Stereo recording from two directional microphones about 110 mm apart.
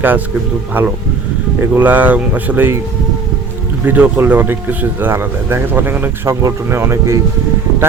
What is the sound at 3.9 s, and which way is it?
Speech, 20° right (ahead or behind).